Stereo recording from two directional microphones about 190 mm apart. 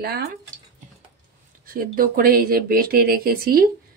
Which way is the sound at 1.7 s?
50° right (ahead or behind).